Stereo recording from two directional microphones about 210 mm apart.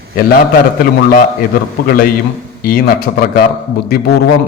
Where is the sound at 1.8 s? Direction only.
45° left (ahead or behind).